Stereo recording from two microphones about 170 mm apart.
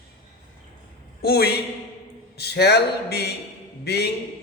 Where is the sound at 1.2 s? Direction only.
70° left (ahead or behind).